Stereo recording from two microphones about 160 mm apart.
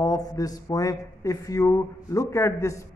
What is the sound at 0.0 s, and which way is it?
Speech, 20° left (ahead or behind).